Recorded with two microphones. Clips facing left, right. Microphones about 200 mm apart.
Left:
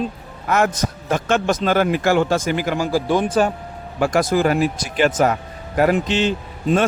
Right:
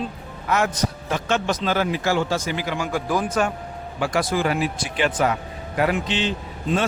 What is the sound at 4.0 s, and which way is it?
A man's voice, 45° left (ahead or behind).